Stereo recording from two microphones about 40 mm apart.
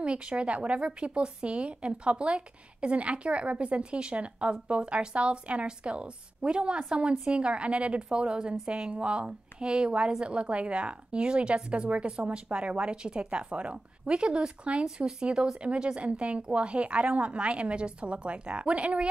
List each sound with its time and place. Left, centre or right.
0.0 s a woman's voice: right